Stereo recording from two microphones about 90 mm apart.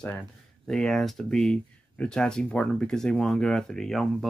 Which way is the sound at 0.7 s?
5° left (ahead or behind).